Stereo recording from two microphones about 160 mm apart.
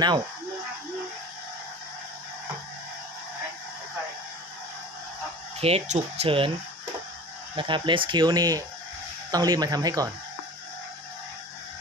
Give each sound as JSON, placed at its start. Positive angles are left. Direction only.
{"t": 5.6, "sound": "speech", "side_deg": -40}
{"t": 7.5, "sound": "speech", "side_deg": -30}